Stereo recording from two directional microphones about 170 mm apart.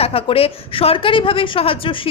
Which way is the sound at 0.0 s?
35° left (ahead or behind).